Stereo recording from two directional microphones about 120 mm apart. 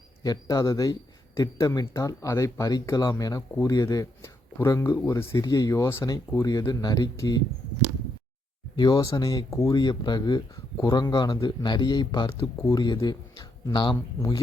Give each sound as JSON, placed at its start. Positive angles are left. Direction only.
{"t": 0.2, "sound": "speech", "side_deg": 30}
{"t": 8.7, "sound": "a man's voice", "side_deg": 35}